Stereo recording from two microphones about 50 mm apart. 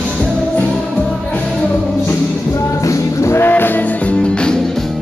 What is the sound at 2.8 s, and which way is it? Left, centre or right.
Music, left.